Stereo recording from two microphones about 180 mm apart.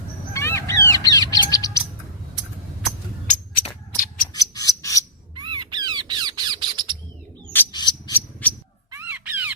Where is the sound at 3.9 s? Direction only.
50° left (ahead or behind).